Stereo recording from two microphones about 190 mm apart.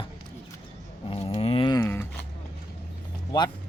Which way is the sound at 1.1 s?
30° left (ahead or behind).